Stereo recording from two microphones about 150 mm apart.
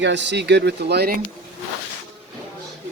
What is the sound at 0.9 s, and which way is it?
Speech, 90° right.